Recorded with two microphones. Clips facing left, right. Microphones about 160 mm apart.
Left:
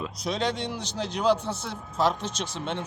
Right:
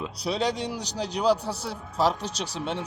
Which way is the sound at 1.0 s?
35° right (ahead or behind).